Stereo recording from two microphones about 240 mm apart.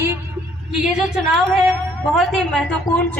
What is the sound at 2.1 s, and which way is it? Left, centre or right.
Speech, centre.